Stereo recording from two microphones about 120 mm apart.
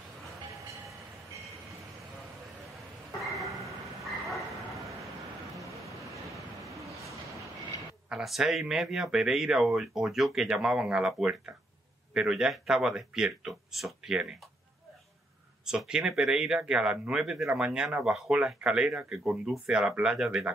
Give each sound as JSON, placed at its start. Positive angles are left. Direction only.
{"t": 4.0, "sound": "bow-wow", "side_deg": 0}
{"t": 5.8, "sound": "vehicle", "side_deg": 0}
{"t": 6.6, "sound": "a sound", "side_deg": -25}
{"t": 8.1, "sound": "speech", "side_deg": 0}
{"t": 15.6, "sound": "speech", "side_deg": -5}